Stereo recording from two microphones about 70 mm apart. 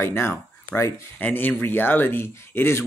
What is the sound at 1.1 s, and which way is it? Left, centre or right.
Speech, left.